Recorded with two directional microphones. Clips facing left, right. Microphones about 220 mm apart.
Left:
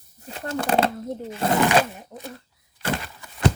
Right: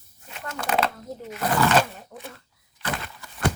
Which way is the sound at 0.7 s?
30° left (ahead or behind).